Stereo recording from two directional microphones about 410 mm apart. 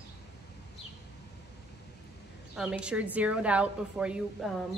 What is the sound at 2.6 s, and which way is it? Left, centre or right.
Speech, centre.